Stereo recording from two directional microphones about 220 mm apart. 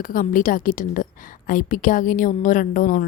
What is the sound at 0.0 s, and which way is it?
A woman's voice, 40° left (ahead or behind).